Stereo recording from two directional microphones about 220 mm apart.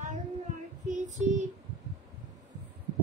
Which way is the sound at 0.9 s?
35° right (ahead or behind).